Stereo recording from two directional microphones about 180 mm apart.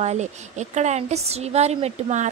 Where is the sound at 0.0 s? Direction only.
40° right (ahead or behind).